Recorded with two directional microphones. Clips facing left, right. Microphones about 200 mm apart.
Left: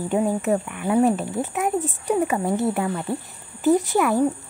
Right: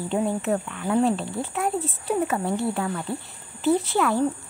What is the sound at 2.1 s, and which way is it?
Speech, centre (ahead or behind).